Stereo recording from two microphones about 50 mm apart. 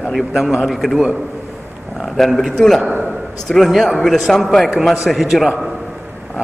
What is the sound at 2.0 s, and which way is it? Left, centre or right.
A man's voice, centre.